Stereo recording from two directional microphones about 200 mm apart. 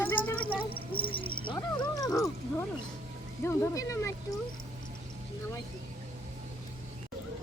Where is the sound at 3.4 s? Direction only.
15° left (ahead or behind).